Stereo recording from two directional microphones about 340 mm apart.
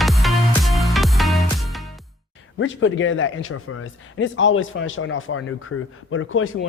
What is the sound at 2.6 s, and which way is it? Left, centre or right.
Speech, left.